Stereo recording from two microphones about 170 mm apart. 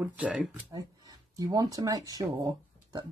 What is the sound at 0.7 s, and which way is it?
Speech, 20° right (ahead or behind).